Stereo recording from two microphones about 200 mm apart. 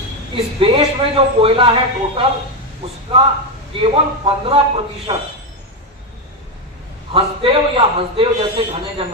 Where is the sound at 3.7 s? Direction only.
25° right (ahead or behind).